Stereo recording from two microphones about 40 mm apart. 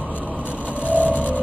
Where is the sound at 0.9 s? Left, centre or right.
Left.